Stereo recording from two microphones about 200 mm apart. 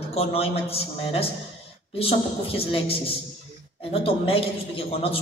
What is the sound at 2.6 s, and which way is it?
Speech, 30° left (ahead or behind).